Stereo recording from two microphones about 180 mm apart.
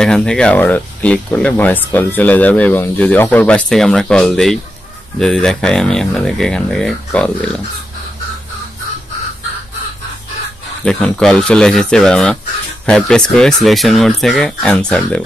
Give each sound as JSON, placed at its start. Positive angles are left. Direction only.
{"t": 0.0, "sound": "speech", "side_deg": 5}
{"t": 10.9, "sound": "speech", "side_deg": 5}